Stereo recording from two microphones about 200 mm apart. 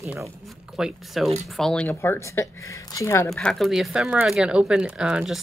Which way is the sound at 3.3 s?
Centre (ahead or behind).